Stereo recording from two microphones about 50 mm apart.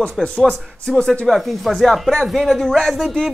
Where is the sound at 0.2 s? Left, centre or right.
Centre.